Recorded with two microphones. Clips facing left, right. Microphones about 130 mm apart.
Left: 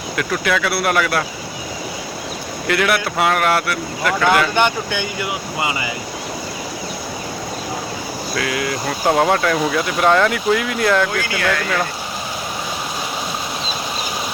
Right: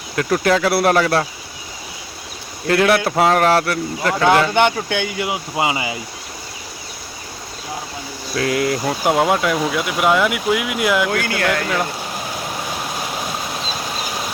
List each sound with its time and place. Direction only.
0.2 s speech: 35° right (ahead or behind)
2.6 s speech: 35° right (ahead or behind)
8.4 s speech: 40° right (ahead or behind)
9.0 s speech: 10° right (ahead or behind)